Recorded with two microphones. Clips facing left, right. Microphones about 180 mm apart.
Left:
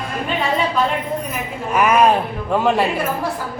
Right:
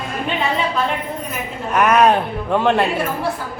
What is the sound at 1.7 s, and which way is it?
A woman's voice, 5° left (ahead or behind).